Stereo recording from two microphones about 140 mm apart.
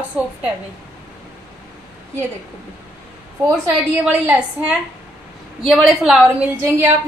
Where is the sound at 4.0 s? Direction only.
10° right (ahead or behind).